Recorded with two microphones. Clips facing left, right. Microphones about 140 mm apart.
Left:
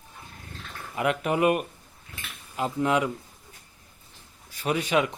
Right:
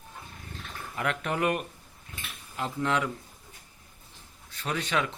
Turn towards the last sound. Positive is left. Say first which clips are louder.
# left 5 dB
turn(degrees=15)  # may be behind; listen again after turning